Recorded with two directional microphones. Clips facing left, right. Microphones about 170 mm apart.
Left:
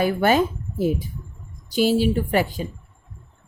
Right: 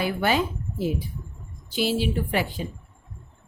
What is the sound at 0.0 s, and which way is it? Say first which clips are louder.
A woman's voice: left 5 dB; 45° left (ahead or behind).